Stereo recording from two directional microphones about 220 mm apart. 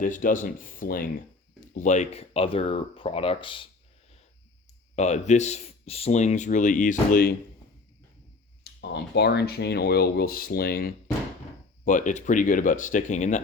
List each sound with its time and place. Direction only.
0.0 s speech: 35° left (ahead or behind)
4.9 s speech: 30° left (ahead or behind)
8.8 s speech: 50° left (ahead or behind); by 13.4 s 35° left (ahead or behind)